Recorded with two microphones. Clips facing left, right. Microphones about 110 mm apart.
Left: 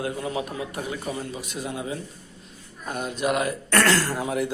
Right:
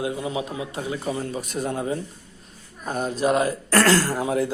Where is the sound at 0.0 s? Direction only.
20° right (ahead or behind).